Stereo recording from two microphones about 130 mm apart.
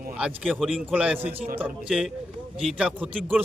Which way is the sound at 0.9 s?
10° right (ahead or behind).